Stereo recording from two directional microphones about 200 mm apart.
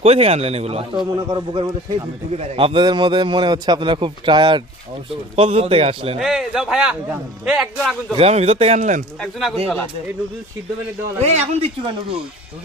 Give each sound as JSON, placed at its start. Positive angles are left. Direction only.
{"t": 0.0, "sound": "a man's voice", "side_deg": -30}
{"t": 6.1, "sound": "a man's voice", "side_deg": 0}
{"t": 8.1, "sound": "speech", "side_deg": -30}
{"t": 9.2, "sound": "a man's voice", "side_deg": 0}
{"t": 11.2, "sound": "speech", "side_deg": -35}